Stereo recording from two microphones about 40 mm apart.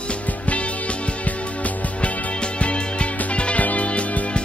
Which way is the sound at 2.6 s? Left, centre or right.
Left.